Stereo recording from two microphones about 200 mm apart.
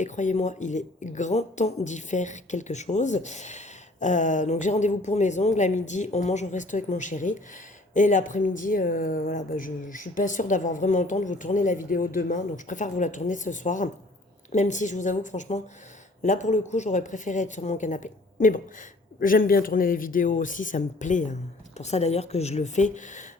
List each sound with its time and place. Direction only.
0.0 s speech: 35° left (ahead or behind)